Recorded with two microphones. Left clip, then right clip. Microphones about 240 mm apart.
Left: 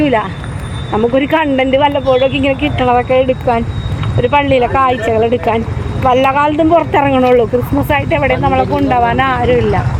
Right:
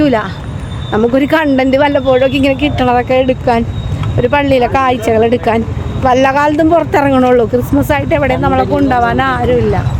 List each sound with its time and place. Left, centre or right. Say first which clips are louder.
0.0 s a man's voice: right 1 dB; centre